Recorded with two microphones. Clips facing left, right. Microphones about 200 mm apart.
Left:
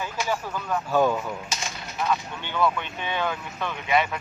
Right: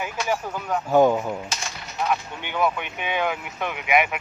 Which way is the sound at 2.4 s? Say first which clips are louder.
Even; 15° right (ahead or behind).